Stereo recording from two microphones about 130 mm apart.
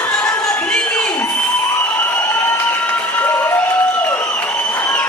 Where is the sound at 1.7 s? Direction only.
15° left (ahead or behind).